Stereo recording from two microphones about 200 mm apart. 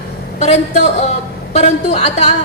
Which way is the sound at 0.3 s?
35° left (ahead or behind).